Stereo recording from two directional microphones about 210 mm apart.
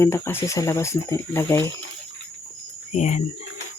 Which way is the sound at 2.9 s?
35° left (ahead or behind).